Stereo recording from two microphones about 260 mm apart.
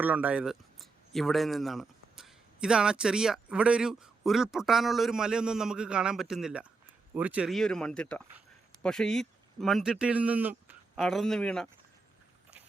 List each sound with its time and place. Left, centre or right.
0.0 s a man's voice: centre